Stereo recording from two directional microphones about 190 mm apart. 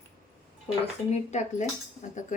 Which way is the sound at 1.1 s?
40° left (ahead or behind).